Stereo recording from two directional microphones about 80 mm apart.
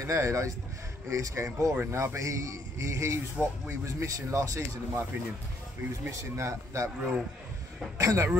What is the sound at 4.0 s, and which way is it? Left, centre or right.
Speech, right.